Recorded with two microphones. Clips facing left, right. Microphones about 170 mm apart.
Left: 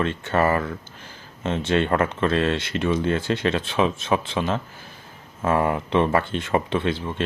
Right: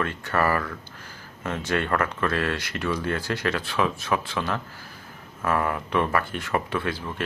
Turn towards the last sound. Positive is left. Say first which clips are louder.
# left 4 dB
turn(degrees=25)  # may be behind; listen again after turning